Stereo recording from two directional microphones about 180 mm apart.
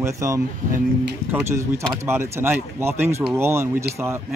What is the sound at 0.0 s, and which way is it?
Speech, 15° right (ahead or behind).